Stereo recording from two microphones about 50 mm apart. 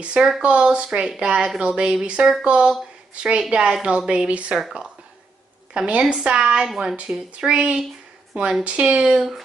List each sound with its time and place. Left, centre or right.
0.0 s a woman's voice: right
5.9 s a woman's voice: right
9.0 s a woman's voice: centre